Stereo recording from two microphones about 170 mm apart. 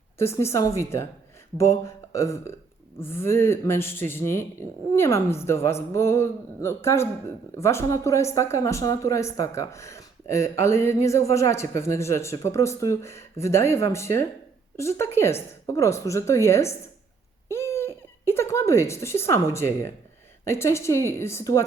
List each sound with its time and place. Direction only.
0.2 s speech: 15° left (ahead or behind)
17.5 s a sound: 15° left (ahead or behind)
19.3 s speech: 15° left (ahead or behind)